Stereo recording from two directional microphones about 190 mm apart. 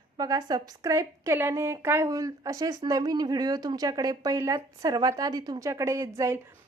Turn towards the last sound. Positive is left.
turn(degrees=-15)  # may be behind; listen again after turning